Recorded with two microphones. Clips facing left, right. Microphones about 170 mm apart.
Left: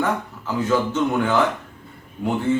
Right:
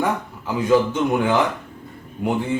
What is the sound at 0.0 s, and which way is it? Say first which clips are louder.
Speech: even; 10° right (ahead or behind).